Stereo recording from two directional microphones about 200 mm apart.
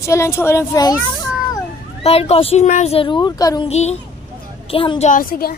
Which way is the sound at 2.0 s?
30° left (ahead or behind).